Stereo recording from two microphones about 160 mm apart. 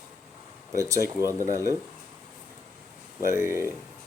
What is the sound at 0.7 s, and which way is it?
Speech, 20° right (ahead or behind).